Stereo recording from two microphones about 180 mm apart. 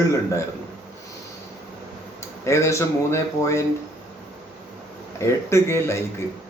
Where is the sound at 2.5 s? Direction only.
15° left (ahead or behind).